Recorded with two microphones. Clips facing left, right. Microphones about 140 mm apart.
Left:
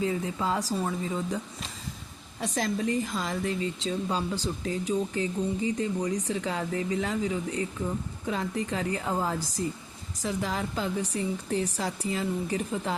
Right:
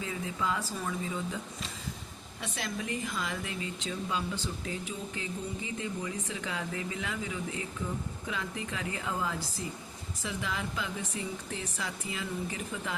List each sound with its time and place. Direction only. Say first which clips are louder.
0.0 s speech: left 6 dB; 35° left (ahead or behind)
2.4 s speech: left 8 dB; 35° left (ahead or behind)